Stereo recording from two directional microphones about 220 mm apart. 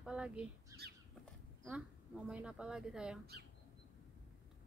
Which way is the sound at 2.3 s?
5° right (ahead or behind).